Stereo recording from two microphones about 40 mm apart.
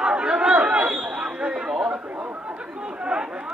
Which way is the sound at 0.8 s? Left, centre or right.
Right.